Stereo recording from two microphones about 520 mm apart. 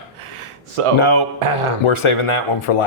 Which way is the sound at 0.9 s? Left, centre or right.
Left.